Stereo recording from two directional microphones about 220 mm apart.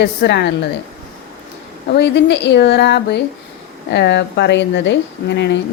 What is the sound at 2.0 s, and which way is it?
A woman's voice, 50° left (ahead or behind).